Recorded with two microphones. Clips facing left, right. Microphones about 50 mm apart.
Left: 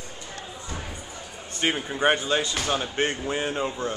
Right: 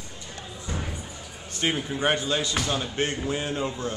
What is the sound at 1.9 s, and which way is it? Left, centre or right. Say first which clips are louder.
Speech: left 5 dB; centre.